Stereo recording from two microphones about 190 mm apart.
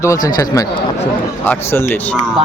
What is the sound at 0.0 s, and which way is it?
Speech, 20° left (ahead or behind).